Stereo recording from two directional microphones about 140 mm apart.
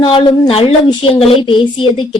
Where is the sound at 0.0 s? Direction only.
40° left (ahead or behind).